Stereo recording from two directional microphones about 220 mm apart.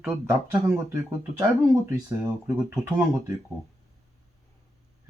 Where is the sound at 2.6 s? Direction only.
15° right (ahead or behind).